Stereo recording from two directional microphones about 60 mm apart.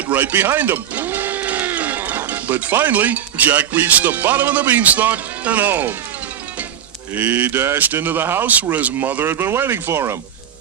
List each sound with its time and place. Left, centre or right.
0.1 s speech: right
7.1 s speech: right